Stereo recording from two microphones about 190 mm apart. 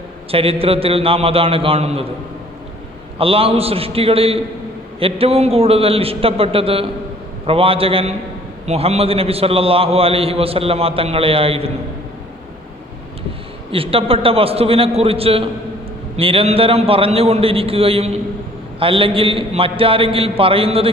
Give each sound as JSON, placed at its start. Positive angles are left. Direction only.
{"t": 0.3, "sound": "a man's voice", "side_deg": -30}
{"t": 3.2, "sound": "a man's voice", "side_deg": -30}
{"t": 13.7, "sound": "a man's voice", "side_deg": -30}